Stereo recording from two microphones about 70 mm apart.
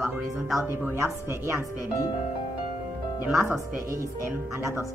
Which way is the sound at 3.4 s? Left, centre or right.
Right.